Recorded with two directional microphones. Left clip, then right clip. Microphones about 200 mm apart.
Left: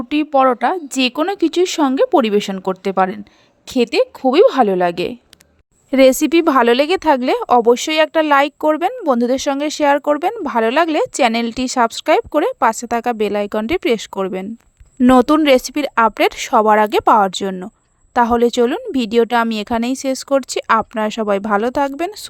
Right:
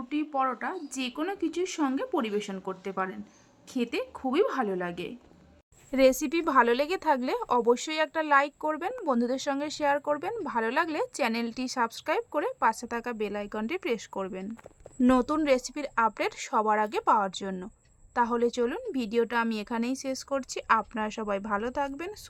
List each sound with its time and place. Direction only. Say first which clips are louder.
0.1 s a woman's voice: left 15 dB; 40° left (ahead or behind)